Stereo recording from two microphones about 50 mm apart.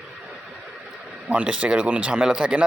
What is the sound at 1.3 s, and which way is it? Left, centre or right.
Speech, right.